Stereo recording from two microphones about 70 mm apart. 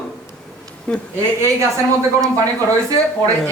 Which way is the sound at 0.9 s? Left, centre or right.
Centre.